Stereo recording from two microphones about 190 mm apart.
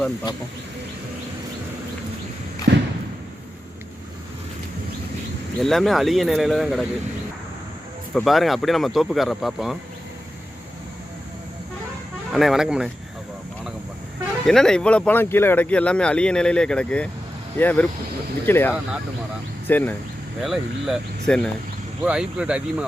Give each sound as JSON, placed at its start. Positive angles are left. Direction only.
{"t": 2.7, "sound": "a sound", "side_deg": -65}
{"t": 5.5, "sound": "speech", "side_deg": 0}
{"t": 8.1, "sound": "speech", "side_deg": 0}
{"t": 12.3, "sound": "speech", "side_deg": 0}
{"t": 14.4, "sound": "speech", "side_deg": 5}
{"t": 20.4, "sound": "speech", "side_deg": 0}